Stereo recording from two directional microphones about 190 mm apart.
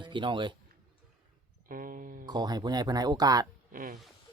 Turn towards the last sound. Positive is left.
turn(degrees=-45)  # may be behind; listen again after turning